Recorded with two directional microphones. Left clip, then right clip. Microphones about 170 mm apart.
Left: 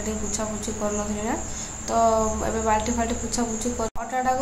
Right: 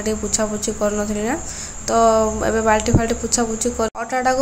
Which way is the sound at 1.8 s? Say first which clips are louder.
Right 6 dB; 20° right (ahead or behind).